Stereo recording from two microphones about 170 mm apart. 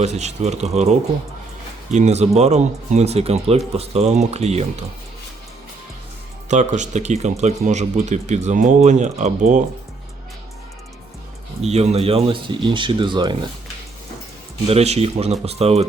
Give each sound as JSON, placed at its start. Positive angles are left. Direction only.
{"t": 0.0, "sound": "speech", "side_deg": -40}
{"t": 6.5, "sound": "speech", "side_deg": -45}
{"t": 11.6, "sound": "speech", "side_deg": -40}
{"t": 14.7, "sound": "speech", "side_deg": -40}